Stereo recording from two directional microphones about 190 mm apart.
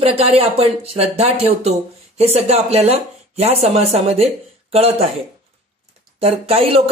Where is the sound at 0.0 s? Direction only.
30° right (ahead or behind).